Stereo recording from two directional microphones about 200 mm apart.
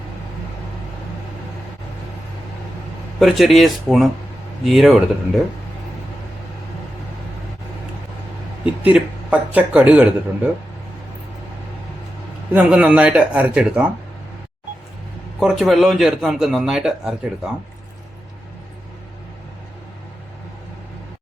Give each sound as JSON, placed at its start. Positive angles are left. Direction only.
{"t": 3.2, "sound": "a man's voice", "side_deg": 0}
{"t": 8.6, "sound": "speech", "side_deg": -5}
{"t": 12.5, "sound": "speech", "side_deg": -5}
{"t": 15.4, "sound": "a man's voice", "side_deg": 0}